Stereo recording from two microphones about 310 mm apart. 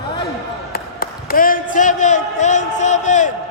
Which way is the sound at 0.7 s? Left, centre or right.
Left.